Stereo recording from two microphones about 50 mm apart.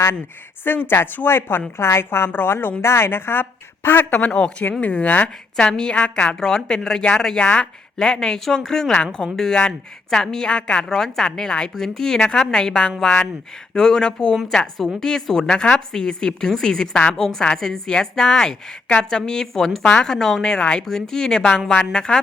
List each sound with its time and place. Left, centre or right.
0.6 s speech: left
1.8 s a woman's voice: left
2.3 s speech: left
2.8 s speech: left
4.3 s a woman's voice: centre
4.8 s a woman's voice: left
10.8 s a woman's voice: centre
19.8 s speech: left
20.1 s a woman's voice: centre